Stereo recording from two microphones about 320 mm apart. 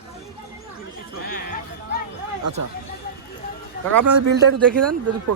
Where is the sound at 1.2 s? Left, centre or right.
Left.